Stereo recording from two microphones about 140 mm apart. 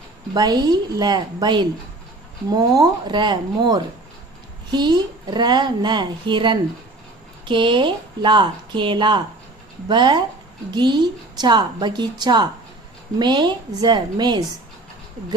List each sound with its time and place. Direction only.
0.3 s a woman's voice: 30° right (ahead or behind)